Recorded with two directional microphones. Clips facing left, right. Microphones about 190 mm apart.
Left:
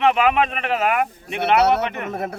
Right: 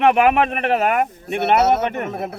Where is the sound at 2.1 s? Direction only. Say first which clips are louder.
Even; centre (ahead or behind).